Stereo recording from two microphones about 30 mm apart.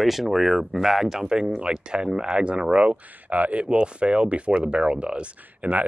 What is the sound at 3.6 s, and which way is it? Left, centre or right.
Speech, right.